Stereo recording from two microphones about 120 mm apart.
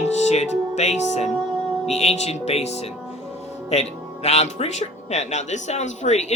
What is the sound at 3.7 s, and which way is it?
Speech, 60° left (ahead or behind).